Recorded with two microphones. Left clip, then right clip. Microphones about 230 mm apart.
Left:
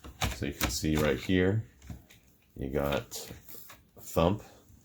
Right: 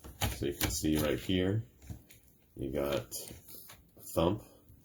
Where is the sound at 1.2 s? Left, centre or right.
Left.